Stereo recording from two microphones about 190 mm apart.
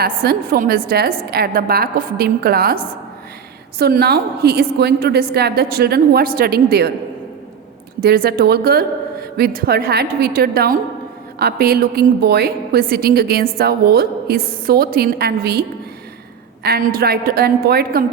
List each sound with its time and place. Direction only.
0.0 s a woman's voice: 50° right (ahead or behind)
8.0 s a woman's voice: 55° right (ahead or behind)
16.6 s a woman's voice: 55° right (ahead or behind)